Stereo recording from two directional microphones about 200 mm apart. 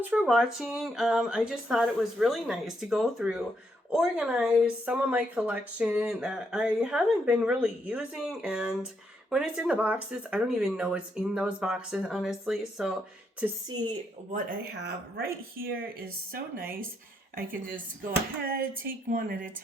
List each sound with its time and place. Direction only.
0.0 s speech: 5° right (ahead or behind)
14.3 s speech: 55° right (ahead or behind)
17.3 s a woman's voice: 45° right (ahead or behind)